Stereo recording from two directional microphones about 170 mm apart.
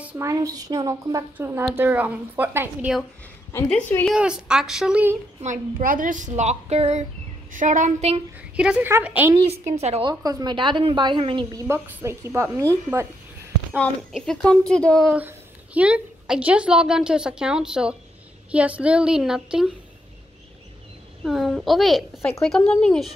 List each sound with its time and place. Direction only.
0.0 s a woman's voice: 10° right (ahead or behind)
3.5 s a woman's voice: 10° left (ahead or behind); by 5.1 s 5° right (ahead or behind)
5.4 s a woman's voice: 50° right (ahead or behind)
8.4 s a woman's voice: 5° right (ahead or behind)
9.5 s a woman's voice: 40° right (ahead or behind)
10.0 s a woman's voice: 25° right (ahead or behind)
11.6 s a woman's voice: 15° right (ahead or behind)
14.1 s a woman's voice: 5° left (ahead or behind)
15.1 s a woman's voice: 10° right (ahead or behind)
21.2 s a woman's voice: centre (ahead or behind)